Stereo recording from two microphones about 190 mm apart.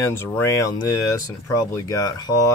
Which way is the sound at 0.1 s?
15° left (ahead or behind).